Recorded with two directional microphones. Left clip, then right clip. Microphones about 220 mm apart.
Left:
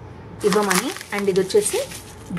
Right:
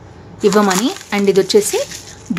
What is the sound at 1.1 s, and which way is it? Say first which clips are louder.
Speech: right 7 dB; 45° right (ahead or behind).